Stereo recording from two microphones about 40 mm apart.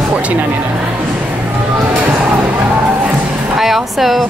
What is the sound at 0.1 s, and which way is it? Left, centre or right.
Speech, right.